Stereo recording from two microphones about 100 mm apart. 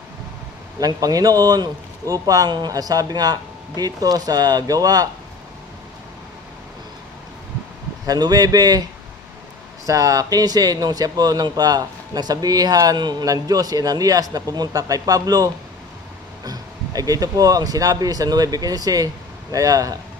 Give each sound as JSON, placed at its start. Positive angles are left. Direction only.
{"t": 0.7, "sound": "speech", "side_deg": -40}
{"t": 8.1, "sound": "speech", "side_deg": -40}
{"t": 9.8, "sound": "speech", "side_deg": -35}